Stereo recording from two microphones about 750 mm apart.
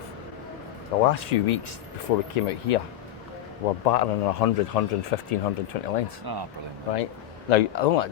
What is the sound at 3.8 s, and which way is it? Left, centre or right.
Speech, left.